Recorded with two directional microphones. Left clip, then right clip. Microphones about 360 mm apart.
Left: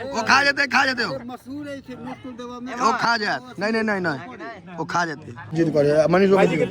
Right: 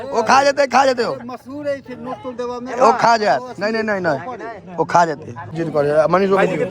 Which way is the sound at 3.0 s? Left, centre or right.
Centre.